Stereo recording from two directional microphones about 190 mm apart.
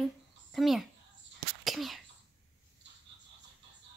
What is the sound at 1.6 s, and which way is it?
Cough, centre (ahead or behind).